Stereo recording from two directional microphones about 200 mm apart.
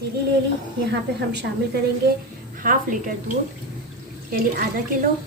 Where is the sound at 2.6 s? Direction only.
40° right (ahead or behind).